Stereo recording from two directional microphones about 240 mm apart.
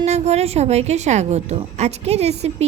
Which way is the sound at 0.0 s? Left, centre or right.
Right.